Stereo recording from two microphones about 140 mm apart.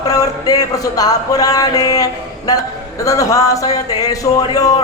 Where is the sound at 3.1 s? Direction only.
25° left (ahead or behind).